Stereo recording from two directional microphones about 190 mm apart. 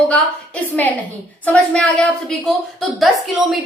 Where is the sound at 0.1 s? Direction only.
5° left (ahead or behind).